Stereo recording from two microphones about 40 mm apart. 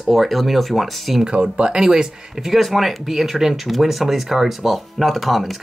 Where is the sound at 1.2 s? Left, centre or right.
Right.